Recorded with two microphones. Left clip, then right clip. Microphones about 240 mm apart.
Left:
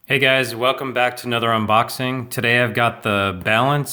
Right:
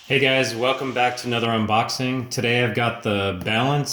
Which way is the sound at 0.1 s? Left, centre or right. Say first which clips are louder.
Left 2 dB; left.